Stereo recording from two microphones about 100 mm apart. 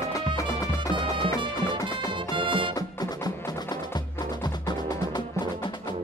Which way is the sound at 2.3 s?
55° right (ahead or behind).